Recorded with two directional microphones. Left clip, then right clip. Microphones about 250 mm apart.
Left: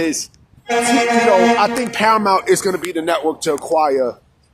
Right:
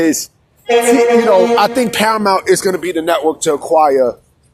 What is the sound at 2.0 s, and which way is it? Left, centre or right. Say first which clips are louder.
Speech: left 1 dB; centre.